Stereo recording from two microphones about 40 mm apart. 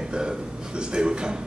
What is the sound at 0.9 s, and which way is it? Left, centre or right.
Speech, right.